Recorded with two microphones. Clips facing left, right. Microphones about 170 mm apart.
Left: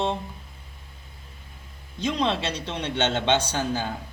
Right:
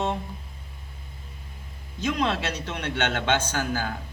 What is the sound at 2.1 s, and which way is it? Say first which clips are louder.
A man's voice: left 1 dB; 25° left (ahead or behind).